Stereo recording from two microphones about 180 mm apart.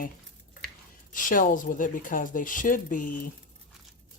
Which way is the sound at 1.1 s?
45° left (ahead or behind).